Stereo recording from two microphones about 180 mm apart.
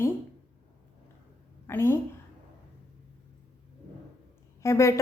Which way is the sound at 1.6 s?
15° left (ahead or behind).